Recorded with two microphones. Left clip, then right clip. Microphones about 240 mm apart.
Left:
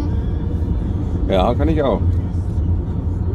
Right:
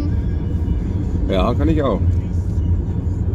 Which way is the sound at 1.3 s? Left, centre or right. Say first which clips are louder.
Left 2 dB; centre.